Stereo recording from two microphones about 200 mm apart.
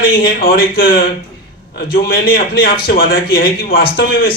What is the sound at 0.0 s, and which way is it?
A man's voice, 50° left (ahead or behind).